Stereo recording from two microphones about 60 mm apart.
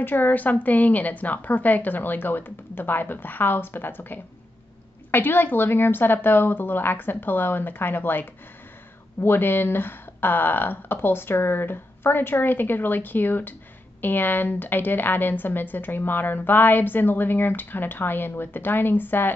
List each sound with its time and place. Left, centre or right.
0.0 s a woman's voice: left